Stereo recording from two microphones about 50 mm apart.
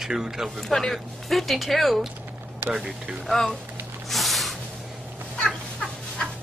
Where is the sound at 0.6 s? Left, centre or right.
Centre.